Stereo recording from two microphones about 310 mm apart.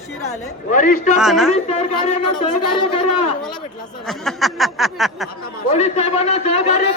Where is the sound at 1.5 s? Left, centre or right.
Left.